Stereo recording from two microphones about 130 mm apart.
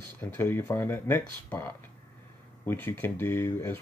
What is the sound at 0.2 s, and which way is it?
Speech, 15° left (ahead or behind).